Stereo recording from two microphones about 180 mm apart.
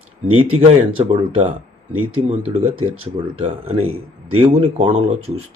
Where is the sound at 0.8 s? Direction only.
30° right (ahead or behind).